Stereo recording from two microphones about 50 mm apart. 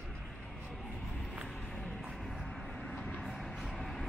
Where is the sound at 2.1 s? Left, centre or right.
Centre.